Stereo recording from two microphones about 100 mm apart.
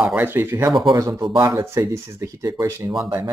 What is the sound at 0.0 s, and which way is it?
Speech, 20° right (ahead or behind).